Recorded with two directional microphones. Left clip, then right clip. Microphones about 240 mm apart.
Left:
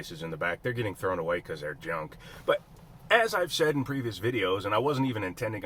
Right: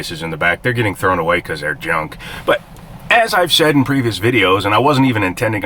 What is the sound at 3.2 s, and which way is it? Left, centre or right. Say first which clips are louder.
Speech: right 14 dB; centre.